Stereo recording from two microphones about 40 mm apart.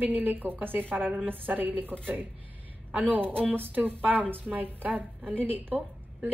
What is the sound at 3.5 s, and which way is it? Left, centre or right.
A woman's voice, right.